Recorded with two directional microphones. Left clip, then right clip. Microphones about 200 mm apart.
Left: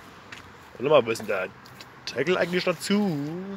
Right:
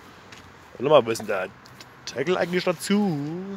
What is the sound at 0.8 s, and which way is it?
Speech, 20° right (ahead or behind).